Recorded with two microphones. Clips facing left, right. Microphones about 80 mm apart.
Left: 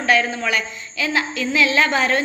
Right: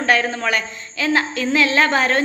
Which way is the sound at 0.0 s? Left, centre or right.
Right.